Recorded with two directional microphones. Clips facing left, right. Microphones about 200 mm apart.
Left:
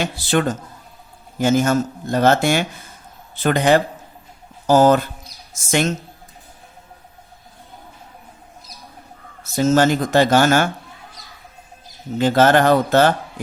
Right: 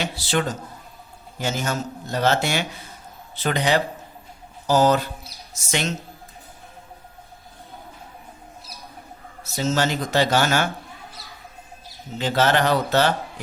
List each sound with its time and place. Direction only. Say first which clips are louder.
0.0 s a man's voice: left 5 dB; 50° left (ahead or behind)
9.6 s a man's voice: left 7 dB; 50° left (ahead or behind)
12.1 s a man's voice: left 6 dB; 50° left (ahead or behind)